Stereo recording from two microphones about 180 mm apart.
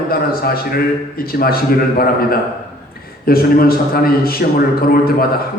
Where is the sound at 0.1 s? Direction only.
55° left (ahead or behind).